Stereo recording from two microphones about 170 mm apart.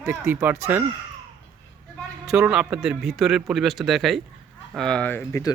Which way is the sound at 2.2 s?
5° right (ahead or behind).